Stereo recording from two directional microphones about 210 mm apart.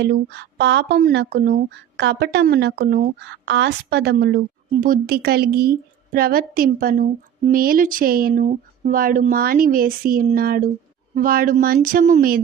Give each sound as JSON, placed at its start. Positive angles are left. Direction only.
{"t": 0.0, "sound": "speech", "side_deg": -55}